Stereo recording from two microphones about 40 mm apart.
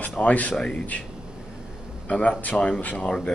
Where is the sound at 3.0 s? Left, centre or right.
Left.